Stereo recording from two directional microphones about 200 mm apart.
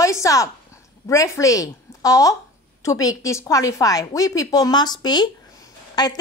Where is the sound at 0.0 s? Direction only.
15° left (ahead or behind).